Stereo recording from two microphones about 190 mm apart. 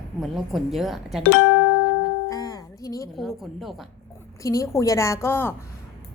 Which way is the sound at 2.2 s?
20° left (ahead or behind).